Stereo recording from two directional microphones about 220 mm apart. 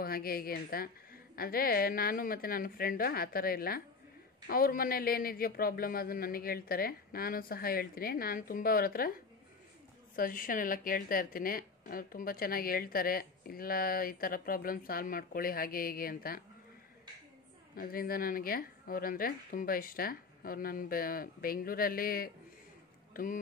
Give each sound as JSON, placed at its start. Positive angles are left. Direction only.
{"t": 0.0, "sound": "a woman's voice", "side_deg": 40}
{"t": 10.1, "sound": "a woman's voice", "side_deg": 40}
{"t": 17.7, "sound": "a woman's voice", "side_deg": 40}